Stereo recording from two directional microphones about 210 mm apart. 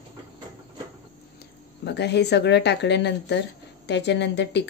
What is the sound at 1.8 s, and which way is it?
Speech, 55° left (ahead or behind).